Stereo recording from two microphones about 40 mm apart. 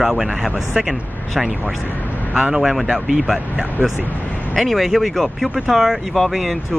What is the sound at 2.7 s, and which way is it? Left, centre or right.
Speech, centre.